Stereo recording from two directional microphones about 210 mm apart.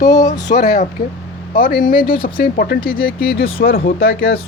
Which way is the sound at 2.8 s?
25° left (ahead or behind).